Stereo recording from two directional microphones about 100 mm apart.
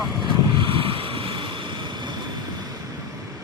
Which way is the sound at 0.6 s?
65° right (ahead or behind).